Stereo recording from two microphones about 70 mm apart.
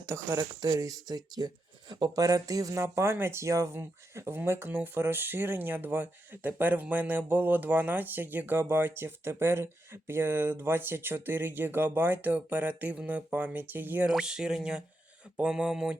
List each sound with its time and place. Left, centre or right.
0.0 s speech: right
0.3 s speech: right
0.8 s speech: right
2.8 s speech: right
14.1 s speech: centre